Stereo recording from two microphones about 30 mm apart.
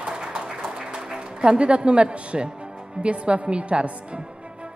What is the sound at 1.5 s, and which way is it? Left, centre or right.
A woman's voice, right.